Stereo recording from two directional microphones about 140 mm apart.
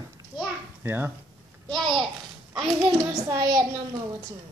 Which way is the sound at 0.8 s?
15° right (ahead or behind).